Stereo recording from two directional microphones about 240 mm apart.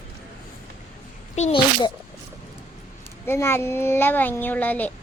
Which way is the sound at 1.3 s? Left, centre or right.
Left.